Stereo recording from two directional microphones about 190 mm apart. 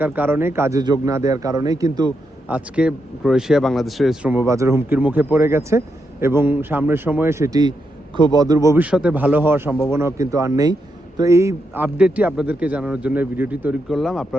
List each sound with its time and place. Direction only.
0.0 s speech: 10° right (ahead or behind)
2.5 s speech: 5° right (ahead or behind)